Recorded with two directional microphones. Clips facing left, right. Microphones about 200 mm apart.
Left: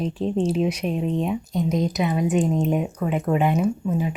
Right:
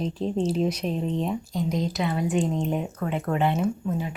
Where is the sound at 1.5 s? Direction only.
20° left (ahead or behind).